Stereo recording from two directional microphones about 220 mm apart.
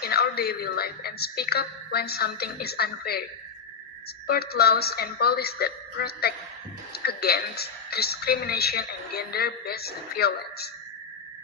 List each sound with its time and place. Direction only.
0.0 s a woman's voice: 45° left (ahead or behind)
4.3 s a woman's voice: 45° left (ahead or behind)